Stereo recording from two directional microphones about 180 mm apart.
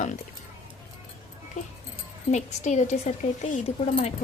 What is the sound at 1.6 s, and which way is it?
A woman's voice, 45° left (ahead or behind).